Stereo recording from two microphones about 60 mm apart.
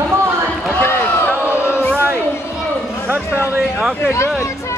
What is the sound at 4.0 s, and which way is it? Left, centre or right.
Speech, left.